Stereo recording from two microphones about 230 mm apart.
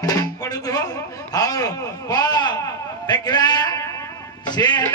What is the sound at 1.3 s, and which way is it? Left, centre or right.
Speech, centre.